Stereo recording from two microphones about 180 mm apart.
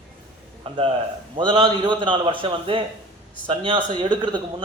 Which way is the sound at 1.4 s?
25° right (ahead or behind).